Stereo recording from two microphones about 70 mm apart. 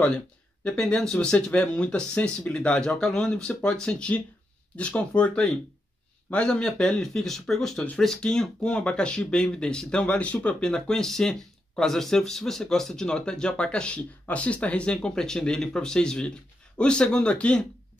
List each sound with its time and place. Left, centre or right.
0.7 s speech: centre